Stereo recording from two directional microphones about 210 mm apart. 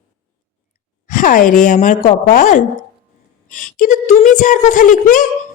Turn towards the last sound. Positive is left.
turn(degrees=40)  # may be behind; listen again after turning